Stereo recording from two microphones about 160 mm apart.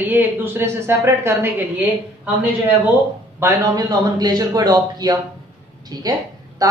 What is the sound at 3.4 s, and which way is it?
A man's voice, 20° right (ahead or behind).